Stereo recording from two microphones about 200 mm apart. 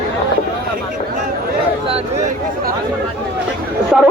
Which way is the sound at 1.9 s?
30° right (ahead or behind).